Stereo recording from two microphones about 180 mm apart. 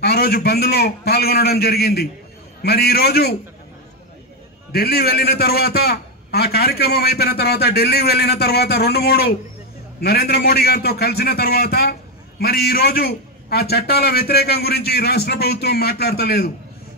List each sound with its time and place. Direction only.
0.0 s a man's voice: 60° left (ahead or behind)
4.7 s a man's voice: 60° left (ahead or behind)